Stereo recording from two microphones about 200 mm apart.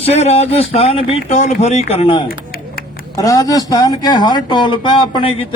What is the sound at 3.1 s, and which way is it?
Speech, 15° left (ahead or behind).